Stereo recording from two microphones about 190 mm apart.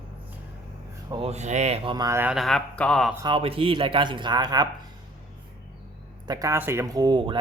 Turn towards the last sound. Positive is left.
turn(degrees=-25)  # may be behind; listen again after turning